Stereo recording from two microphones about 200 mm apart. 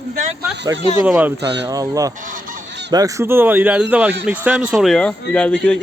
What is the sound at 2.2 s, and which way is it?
Goose, 40° right (ahead or behind).